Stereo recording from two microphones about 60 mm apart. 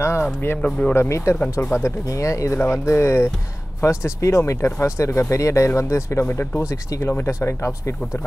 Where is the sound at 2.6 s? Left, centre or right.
Left.